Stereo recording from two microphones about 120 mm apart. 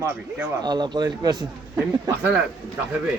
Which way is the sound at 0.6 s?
35° right (ahead or behind).